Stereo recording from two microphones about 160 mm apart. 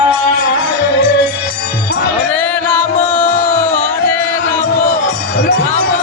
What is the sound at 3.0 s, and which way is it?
Music, 50° left (ahead or behind).